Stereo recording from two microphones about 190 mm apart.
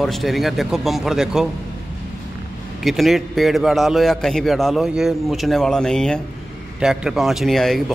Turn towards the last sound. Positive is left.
turn(degrees=0)  # may be behind; listen again after turning